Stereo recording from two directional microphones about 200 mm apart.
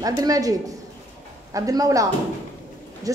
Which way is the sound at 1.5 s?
15° right (ahead or behind).